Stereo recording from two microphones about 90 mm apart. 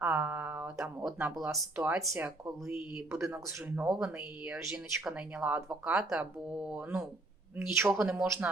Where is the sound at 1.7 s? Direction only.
15° right (ahead or behind).